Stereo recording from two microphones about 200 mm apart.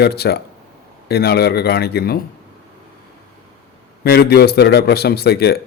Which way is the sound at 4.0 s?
50° left (ahead or behind).